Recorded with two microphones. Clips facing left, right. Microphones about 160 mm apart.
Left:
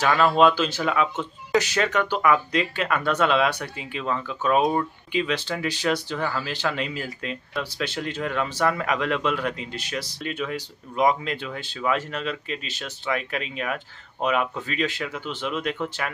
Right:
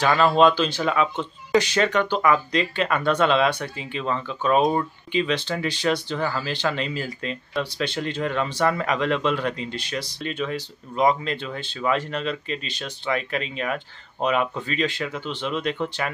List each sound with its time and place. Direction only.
0.0 s speech: 5° left (ahead or behind)